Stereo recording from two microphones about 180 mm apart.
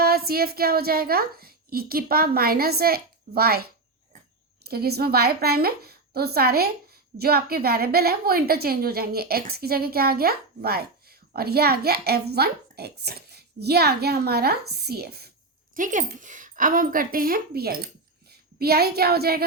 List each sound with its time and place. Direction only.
0.0 s a woman's voice: 60° right (ahead or behind)
15.7 s speech: 45° right (ahead or behind)